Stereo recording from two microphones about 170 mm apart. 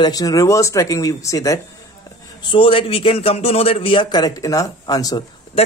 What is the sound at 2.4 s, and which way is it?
Speech, 30° left (ahead or behind).